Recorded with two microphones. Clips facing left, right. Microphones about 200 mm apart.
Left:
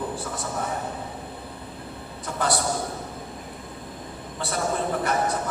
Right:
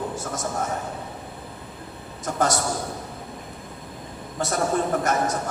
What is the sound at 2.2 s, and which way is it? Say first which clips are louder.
Speech: right 3 dB; 45° right (ahead or behind).